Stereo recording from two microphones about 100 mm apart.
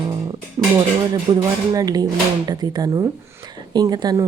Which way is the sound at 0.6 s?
25° right (ahead or behind).